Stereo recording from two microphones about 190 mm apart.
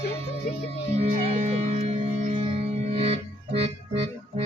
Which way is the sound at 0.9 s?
35° right (ahead or behind).